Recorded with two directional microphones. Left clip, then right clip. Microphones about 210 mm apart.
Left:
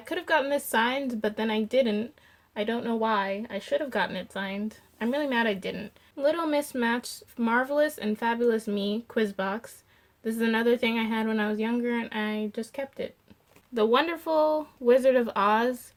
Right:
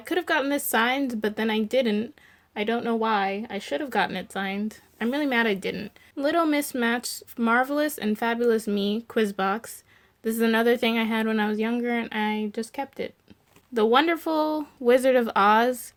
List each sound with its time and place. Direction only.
0.0 s speech: 40° right (ahead or behind)